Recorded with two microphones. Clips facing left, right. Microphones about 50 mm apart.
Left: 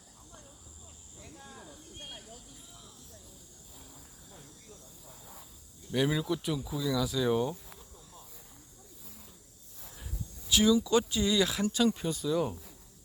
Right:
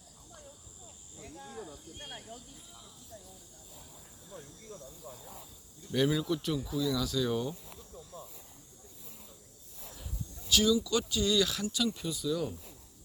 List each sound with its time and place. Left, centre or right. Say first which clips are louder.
5.9 s speech: even; centre
10.5 s speech: left 3 dB; left
11.6 s speech: left 5 dB; left